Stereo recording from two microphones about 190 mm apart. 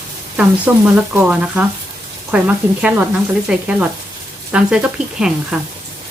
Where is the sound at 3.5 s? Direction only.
5° right (ahead or behind).